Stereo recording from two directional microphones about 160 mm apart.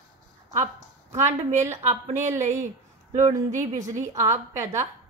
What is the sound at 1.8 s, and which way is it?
Speech, 45° right (ahead or behind).